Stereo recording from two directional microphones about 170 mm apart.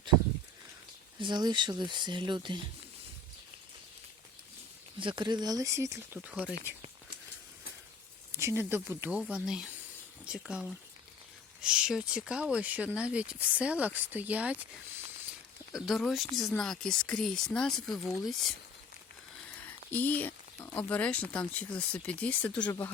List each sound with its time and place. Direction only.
1.2 s speech: 25° right (ahead or behind)
4.9 s speech: 30° right (ahead or behind)
6.2 s speech: 5° right (ahead or behind)
8.3 s speech: 15° right (ahead or behind)
15.7 s speech: centre (ahead or behind)
19.6 s speech: 10° left (ahead or behind)